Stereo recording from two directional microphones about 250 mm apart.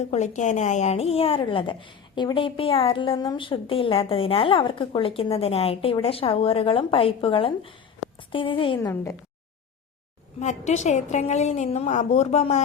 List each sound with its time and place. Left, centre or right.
0.0 s a woman's voice: left
10.4 s a woman's voice: left